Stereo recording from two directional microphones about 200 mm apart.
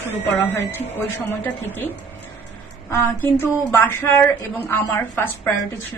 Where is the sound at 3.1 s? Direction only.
10° left (ahead or behind).